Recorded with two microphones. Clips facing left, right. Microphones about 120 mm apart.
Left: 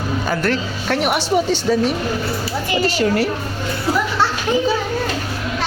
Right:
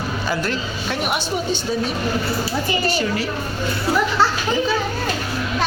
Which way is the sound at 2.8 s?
75° left (ahead or behind).